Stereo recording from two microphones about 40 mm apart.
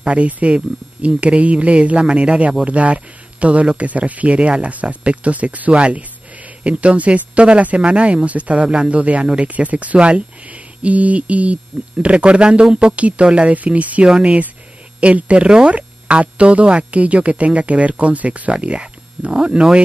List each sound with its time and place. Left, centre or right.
0.0 s speech: right
8.9 s speech: right
9.5 s speech: right
19.3 s speech: right